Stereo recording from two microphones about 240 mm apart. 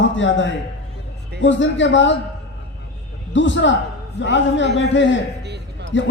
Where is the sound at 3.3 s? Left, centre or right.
Left.